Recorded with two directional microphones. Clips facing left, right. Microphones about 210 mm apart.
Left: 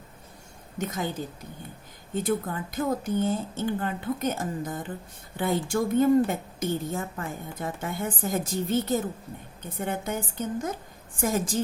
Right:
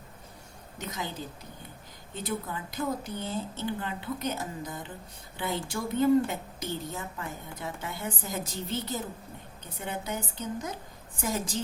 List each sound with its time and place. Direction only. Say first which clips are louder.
0.8 s a woman's voice: left 7 dB; 50° left (ahead or behind)
2.1 s a woman's voice: left 7 dB; 50° left (ahead or behind)